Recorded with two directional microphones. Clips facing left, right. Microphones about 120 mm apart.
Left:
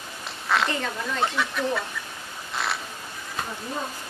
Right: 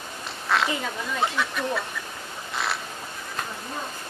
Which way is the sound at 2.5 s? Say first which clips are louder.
Even; centre (ahead or behind).